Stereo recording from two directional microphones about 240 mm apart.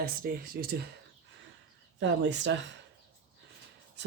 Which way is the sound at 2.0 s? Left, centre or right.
Right.